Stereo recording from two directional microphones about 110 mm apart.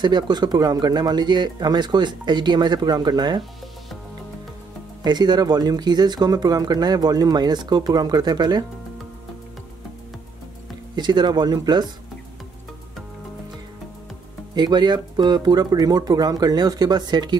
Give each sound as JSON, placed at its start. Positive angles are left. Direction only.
{"t": 0.0, "sound": "speech", "side_deg": -40}
{"t": 5.0, "sound": "speech", "side_deg": -40}
{"t": 11.0, "sound": "speech", "side_deg": -40}
{"t": 14.5, "sound": "speech", "side_deg": -40}